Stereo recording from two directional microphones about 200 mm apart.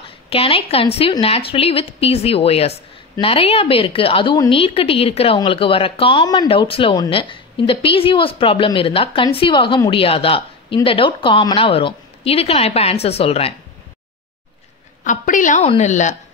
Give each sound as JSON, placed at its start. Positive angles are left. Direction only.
{"t": 0.0, "sound": "a woman's voice", "side_deg": 30}
{"t": 15.0, "sound": "a woman's voice", "side_deg": 40}